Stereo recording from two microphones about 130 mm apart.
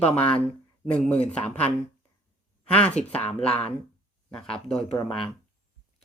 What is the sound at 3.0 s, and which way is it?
Speech, 60° left (ahead or behind).